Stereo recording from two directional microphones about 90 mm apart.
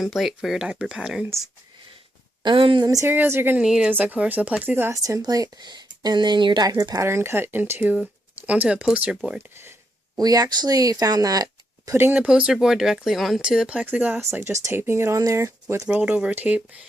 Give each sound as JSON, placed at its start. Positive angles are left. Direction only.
{"t": 0.0, "sound": "speech", "side_deg": 0}
{"t": 2.4, "sound": "speech", "side_deg": -65}
{"t": 2.8, "sound": "speech", "side_deg": -40}
{"t": 3.1, "sound": "speech", "side_deg": -25}
{"t": 3.6, "sound": "speech", "side_deg": -10}
{"t": 4.9, "sound": "speech", "side_deg": -40}
{"t": 6.7, "sound": "speech", "side_deg": -45}
{"t": 7.0, "sound": "speech", "side_deg": -30}
{"t": 10.2, "sound": "speech", "side_deg": -45}
{"t": 11.9, "sound": "speech", "side_deg": -25}
{"t": 12.2, "sound": "speech", "side_deg": -10}
{"t": 14.2, "sound": "speech", "side_deg": -30}
{"t": 15.9, "sound": "speech", "side_deg": -15}